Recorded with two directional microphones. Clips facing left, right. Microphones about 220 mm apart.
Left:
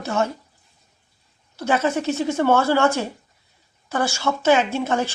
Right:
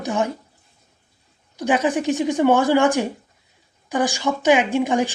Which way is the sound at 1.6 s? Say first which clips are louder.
Right 2 dB; 15° right (ahead or behind).